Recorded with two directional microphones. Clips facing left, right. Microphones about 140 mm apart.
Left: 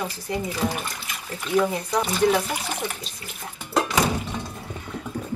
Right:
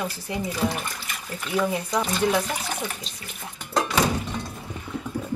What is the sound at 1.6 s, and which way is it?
Speech, 5° left (ahead or behind).